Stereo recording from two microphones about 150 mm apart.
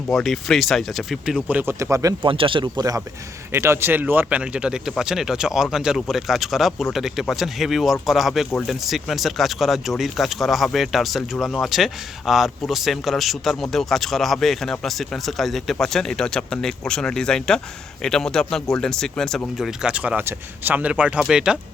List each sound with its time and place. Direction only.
0.1 s speech: centre (ahead or behind)
1.5 s speech: 10° right (ahead or behind)
2.2 s speech: 35° right (ahead or behind); by 21.6 s 5° right (ahead or behind)